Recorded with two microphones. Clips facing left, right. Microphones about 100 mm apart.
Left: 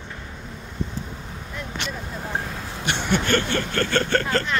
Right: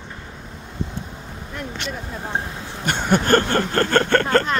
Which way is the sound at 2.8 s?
45° right (ahead or behind).